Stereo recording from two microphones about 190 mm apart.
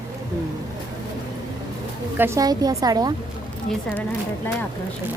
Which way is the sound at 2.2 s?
15° right (ahead or behind).